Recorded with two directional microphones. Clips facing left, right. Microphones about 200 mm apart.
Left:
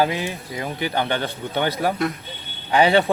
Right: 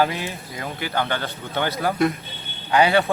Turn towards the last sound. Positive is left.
turn(degrees=20)  # may be behind; listen again after turning